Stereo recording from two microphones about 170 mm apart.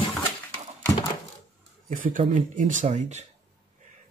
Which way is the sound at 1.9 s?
50° right (ahead or behind).